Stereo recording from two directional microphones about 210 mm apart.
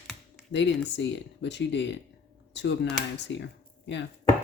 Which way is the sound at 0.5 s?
60° left (ahead or behind).